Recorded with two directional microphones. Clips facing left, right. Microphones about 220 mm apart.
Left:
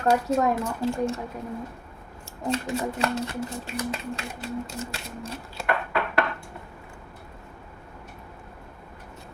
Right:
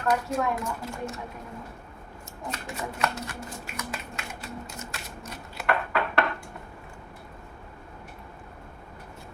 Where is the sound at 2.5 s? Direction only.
30° left (ahead or behind).